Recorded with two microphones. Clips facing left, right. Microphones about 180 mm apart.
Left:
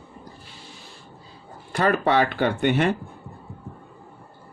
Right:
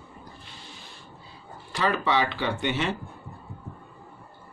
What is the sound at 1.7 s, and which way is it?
Speech, 50° left (ahead or behind).